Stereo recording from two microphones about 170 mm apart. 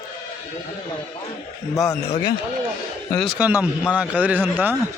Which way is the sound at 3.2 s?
5° right (ahead or behind).